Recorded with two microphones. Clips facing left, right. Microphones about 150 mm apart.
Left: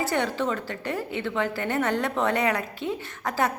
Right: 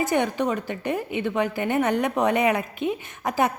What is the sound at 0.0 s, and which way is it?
A woman's voice, 15° right (ahead or behind).